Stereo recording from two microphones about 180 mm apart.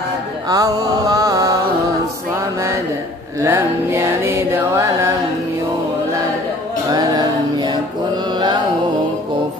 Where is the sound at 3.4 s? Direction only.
15° right (ahead or behind).